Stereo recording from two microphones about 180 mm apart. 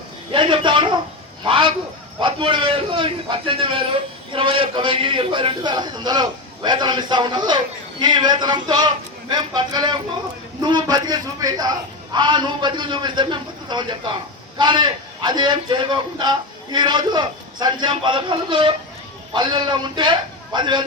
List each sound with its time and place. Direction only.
0.3 s a man's voice: 30° right (ahead or behind)